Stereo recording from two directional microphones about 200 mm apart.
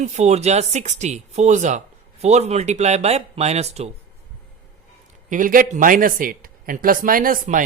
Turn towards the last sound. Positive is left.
turn(degrees=-40)  # may be behind; listen again after turning